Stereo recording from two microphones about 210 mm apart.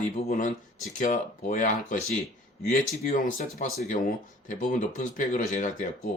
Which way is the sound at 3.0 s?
40° left (ahead or behind).